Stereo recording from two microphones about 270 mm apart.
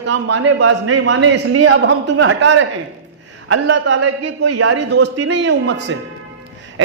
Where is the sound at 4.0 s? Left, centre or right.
Right.